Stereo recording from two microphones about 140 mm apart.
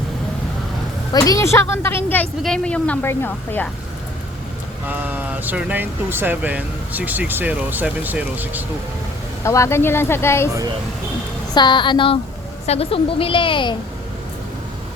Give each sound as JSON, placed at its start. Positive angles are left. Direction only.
{"t": 1.1, "sound": "a woman's voice", "side_deg": 20}
{"t": 4.9, "sound": "speech", "side_deg": -10}
{"t": 9.4, "sound": "a woman's voice", "side_deg": 20}
{"t": 11.5, "sound": "a woman's voice", "side_deg": 35}